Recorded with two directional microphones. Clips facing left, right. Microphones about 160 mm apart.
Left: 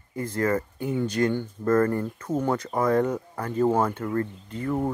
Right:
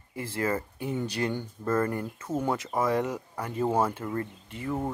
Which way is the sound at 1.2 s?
10° right (ahead or behind).